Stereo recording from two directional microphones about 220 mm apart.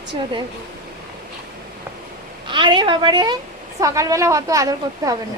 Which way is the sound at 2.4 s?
20° right (ahead or behind).